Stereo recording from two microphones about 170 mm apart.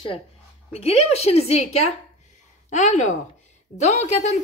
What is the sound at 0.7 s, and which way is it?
A woman's voice, 35° left (ahead or behind).